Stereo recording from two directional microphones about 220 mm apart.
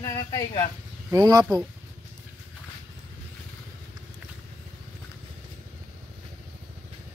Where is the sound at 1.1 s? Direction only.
15° right (ahead or behind).